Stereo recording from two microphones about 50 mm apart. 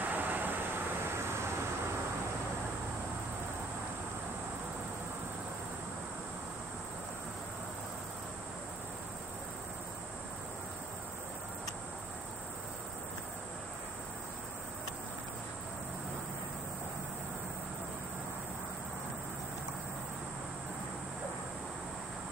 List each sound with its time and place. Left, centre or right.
0.0 s vehicle: right
1.1 s vehicle: right